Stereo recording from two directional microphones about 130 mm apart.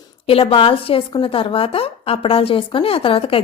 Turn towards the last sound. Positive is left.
turn(degrees=45)  # may be behind; listen again after turning